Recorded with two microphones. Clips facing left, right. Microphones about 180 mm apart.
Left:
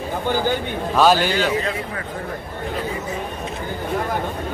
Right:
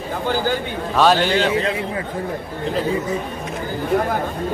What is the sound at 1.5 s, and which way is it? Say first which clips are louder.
Speech: right 3 dB; 25° right (ahead or behind).